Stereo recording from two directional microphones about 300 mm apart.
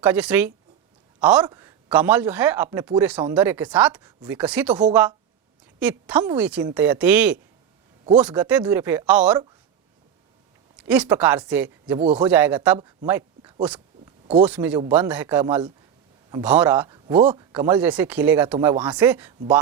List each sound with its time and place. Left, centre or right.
0.0 s a man's voice: centre
10.8 s a man's voice: centre
13.7 s a sound: centre
14.4 s a man's voice: centre